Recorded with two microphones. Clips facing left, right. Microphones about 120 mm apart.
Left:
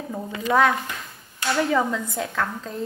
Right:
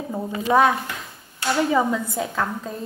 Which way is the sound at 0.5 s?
15° right (ahead or behind).